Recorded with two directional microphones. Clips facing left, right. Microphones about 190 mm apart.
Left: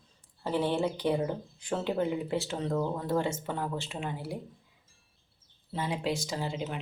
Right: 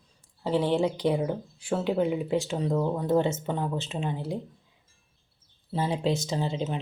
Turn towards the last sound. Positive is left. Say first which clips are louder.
# right 5 dB
turn(degrees=-25)  # may be behind; listen again after turning